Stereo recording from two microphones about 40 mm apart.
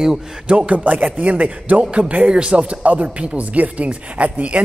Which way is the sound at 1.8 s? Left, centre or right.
Right.